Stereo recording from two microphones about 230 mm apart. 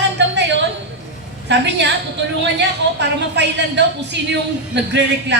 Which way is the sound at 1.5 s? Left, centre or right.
Right.